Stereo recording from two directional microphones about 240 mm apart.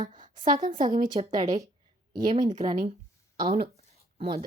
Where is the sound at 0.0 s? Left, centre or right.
Right.